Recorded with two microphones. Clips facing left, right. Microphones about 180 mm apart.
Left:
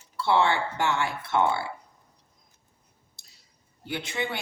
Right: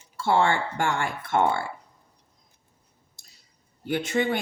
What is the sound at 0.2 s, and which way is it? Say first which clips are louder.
Speech: right 1 dB; 45° right (ahead or behind).